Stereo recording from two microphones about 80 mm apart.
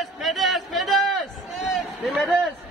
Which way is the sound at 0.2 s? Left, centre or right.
Centre.